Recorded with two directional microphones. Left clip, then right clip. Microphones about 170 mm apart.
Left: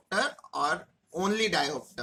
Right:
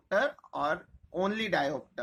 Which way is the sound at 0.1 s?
30° right (ahead or behind).